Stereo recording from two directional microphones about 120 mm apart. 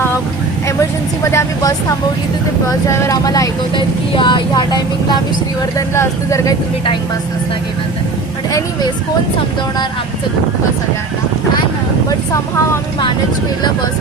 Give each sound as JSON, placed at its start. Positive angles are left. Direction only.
{"t": 0.8, "sound": "speech", "side_deg": 25}
{"t": 3.8, "sound": "speech", "side_deg": 40}
{"t": 5.7, "sound": "speech", "side_deg": 25}
{"t": 12.0, "sound": "speech", "side_deg": 25}